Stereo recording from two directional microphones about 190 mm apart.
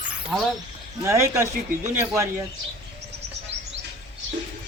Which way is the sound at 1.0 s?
15° right (ahead or behind).